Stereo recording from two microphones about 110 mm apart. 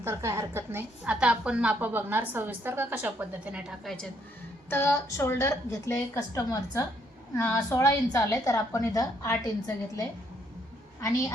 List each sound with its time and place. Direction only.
0.0 s a woman's voice: 25° right (ahead or behind)
1.1 s a woman's voice: 10° right (ahead or behind)
4.7 s a woman's voice: 20° left (ahead or behind)